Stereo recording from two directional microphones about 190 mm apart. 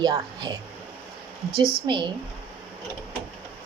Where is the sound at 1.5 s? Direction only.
25° right (ahead or behind).